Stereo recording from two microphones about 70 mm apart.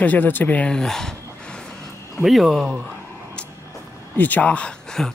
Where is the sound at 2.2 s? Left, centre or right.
Centre.